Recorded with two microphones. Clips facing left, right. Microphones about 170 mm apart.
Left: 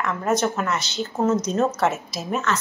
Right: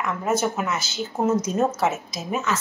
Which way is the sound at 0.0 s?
5° right (ahead or behind).